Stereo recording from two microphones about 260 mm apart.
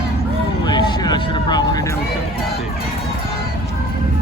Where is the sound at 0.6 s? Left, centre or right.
Centre.